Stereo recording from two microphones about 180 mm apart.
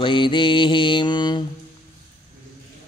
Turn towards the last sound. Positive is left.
turn(degrees=25)  # may be behind; listen again after turning